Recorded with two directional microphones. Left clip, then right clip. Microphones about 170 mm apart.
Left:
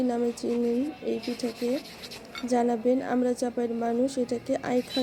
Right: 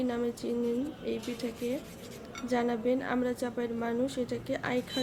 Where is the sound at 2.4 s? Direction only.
15° left (ahead or behind).